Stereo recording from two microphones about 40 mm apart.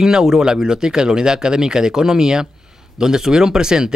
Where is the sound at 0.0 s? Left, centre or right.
Centre.